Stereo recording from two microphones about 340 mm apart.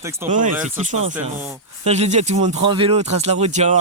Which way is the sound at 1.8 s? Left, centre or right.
Centre.